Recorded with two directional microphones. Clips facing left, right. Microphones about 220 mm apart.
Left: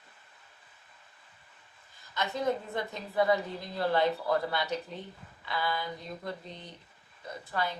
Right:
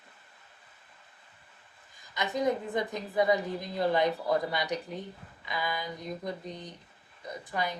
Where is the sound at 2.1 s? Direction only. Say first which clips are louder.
Right 2 dB; 15° right (ahead or behind).